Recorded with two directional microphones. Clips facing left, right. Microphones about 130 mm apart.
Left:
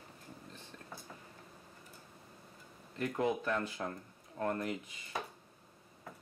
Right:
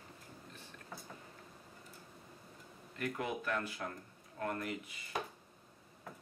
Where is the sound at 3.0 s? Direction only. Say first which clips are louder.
Left 5 dB; 30° left (ahead or behind).